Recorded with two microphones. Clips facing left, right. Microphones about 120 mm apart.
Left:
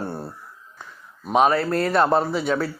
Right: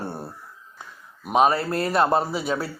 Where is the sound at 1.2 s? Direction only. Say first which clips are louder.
Left 1 dB; 5° right (ahead or behind).